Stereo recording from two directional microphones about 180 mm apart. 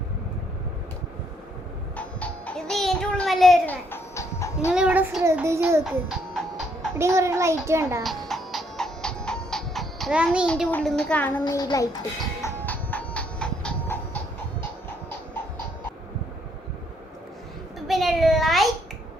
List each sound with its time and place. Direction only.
2.0 s music: 5° left (ahead or behind)
3.9 s music: 15° left (ahead or behind)
4.7 s child singing: 5° right (ahead or behind)
5.8 s music: centre (ahead or behind)
7.0 s a child's voice: 15° right (ahead or behind)
8.0 s music: centre (ahead or behind)
10.4 s a child's voice: 5° left (ahead or behind)
12.4 s music: 10° left (ahead or behind)
17.8 s a sound: centre (ahead or behind)